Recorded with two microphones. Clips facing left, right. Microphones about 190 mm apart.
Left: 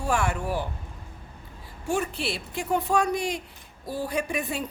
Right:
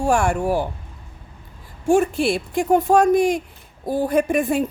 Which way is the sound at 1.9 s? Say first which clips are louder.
Right 11 dB; 50° right (ahead or behind).